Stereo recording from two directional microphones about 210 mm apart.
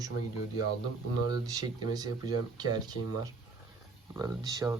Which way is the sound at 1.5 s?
20° right (ahead or behind).